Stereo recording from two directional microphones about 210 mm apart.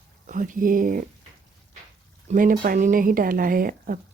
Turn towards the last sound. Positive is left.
turn(degrees=-45)  # may be behind; listen again after turning